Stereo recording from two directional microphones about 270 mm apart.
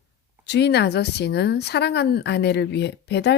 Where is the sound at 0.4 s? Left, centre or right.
Left.